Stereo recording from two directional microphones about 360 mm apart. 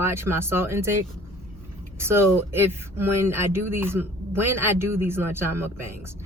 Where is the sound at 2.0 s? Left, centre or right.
Centre.